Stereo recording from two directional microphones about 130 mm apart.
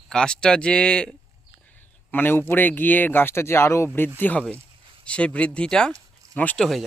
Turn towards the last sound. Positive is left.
turn(degrees=0)  # may be behind; listen again after turning